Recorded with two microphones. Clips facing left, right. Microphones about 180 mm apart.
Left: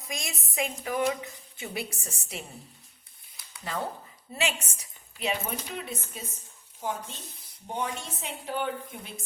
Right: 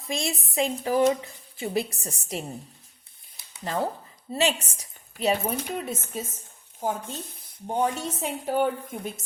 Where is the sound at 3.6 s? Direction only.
40° right (ahead or behind).